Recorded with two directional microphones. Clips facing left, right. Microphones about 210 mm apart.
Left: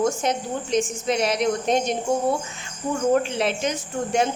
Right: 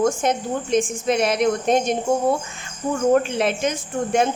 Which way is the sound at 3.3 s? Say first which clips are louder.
Right 2 dB; 50° right (ahead or behind).